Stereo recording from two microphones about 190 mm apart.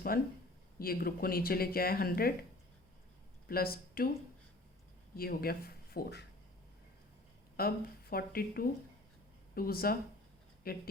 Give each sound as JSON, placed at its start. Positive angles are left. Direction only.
{"t": 0.1, "sound": "speech", "side_deg": 50}
{"t": 3.5, "sound": "speech", "side_deg": 50}
{"t": 5.1, "sound": "speech", "side_deg": 50}
{"t": 7.6, "sound": "speech", "side_deg": 50}